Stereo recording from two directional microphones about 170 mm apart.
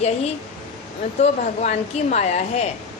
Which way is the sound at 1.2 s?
40° left (ahead or behind).